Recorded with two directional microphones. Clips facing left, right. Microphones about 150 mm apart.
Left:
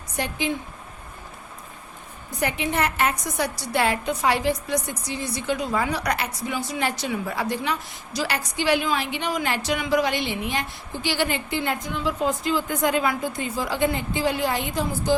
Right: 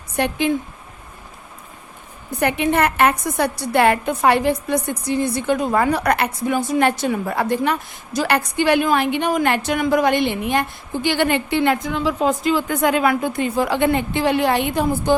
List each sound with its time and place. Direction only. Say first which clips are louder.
0.2 s a woman's voice: right 7 dB; 60° right (ahead or behind)
2.4 s a woman's voice: right 6 dB; 60° right (ahead or behind)